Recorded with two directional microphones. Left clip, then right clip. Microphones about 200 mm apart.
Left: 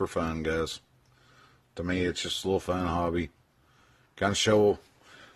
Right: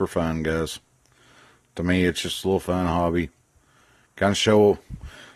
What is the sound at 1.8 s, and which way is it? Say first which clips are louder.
Speech: right 7 dB; 35° right (ahead or behind).